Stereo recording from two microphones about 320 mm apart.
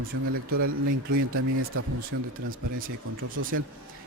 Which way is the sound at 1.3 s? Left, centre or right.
Right.